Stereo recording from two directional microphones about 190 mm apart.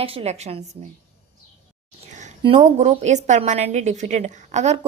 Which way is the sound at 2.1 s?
40° right (ahead or behind).